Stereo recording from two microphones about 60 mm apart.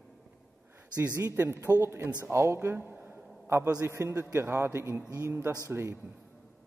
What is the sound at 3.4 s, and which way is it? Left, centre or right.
A man's voice, right.